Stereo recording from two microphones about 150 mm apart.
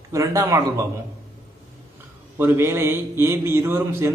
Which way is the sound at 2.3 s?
15° right (ahead or behind).